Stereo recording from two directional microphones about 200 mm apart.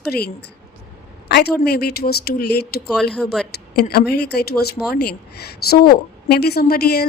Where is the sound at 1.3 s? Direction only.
55° left (ahead or behind).